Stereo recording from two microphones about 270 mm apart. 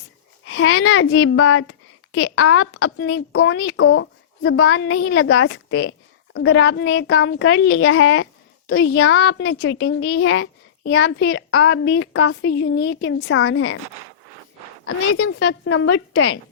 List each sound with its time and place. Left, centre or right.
0.4 s a woman's voice: left
8.6 s a woman's voice: left
15.2 s a woman's voice: left